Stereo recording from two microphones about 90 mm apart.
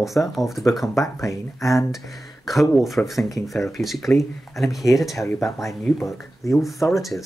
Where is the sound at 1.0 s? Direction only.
35° left (ahead or behind).